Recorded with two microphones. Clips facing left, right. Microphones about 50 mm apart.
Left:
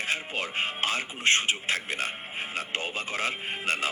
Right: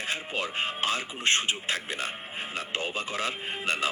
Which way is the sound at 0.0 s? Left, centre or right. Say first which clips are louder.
Left 1 dB; left.